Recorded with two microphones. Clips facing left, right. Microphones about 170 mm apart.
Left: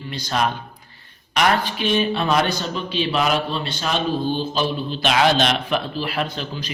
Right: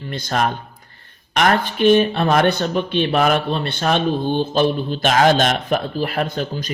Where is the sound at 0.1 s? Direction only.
50° right (ahead or behind).